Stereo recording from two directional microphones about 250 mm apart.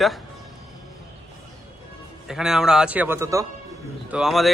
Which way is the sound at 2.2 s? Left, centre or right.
Centre.